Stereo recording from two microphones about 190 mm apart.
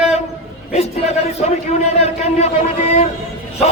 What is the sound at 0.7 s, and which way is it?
A man's voice, 35° left (ahead or behind).